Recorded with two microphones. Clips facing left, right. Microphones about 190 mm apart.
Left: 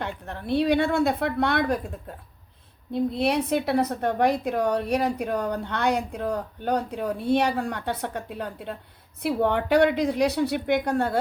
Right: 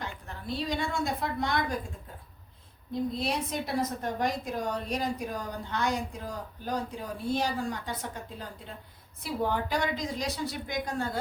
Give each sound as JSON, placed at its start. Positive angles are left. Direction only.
{"t": 0.0, "sound": "a woman's voice", "side_deg": 65}